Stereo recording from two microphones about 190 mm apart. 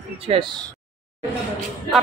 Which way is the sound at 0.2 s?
30° right (ahead or behind).